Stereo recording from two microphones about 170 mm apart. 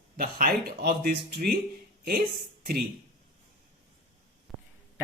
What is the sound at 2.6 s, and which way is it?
Speech, 65° right (ahead or behind).